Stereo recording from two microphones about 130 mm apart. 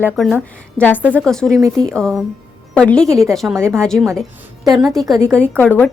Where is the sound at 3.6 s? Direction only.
20° right (ahead or behind).